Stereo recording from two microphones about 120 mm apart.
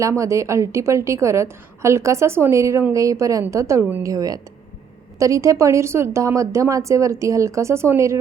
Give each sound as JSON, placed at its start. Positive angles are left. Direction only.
{"t": 0.0, "sound": "a woman's voice", "side_deg": -25}